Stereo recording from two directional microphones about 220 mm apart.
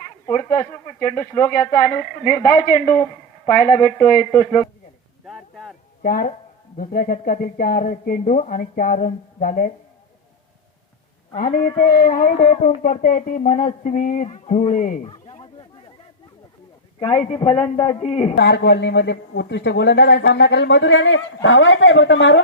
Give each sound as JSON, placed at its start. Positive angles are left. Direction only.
{"t": 0.5, "sound": "a woman's voice", "side_deg": 15}
{"t": 5.2, "sound": "a sound", "side_deg": 0}
{"t": 6.0, "sound": "speech", "side_deg": 40}
{"t": 11.3, "sound": "speech", "side_deg": 40}
{"t": 15.0, "sound": "a sound", "side_deg": 25}
{"t": 17.0, "sound": "a woman's voice", "side_deg": 25}
{"t": 18.3, "sound": "speech", "side_deg": 50}